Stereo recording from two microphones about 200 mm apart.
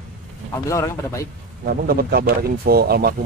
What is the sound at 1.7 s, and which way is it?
Speech, 50° right (ahead or behind).